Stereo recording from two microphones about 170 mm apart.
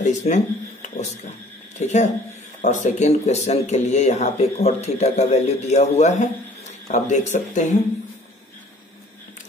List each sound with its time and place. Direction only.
0.0 s speech: 45° left (ahead or behind)